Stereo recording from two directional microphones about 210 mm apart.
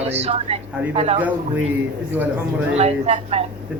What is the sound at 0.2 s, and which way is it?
A woman's voice, 30° right (ahead or behind).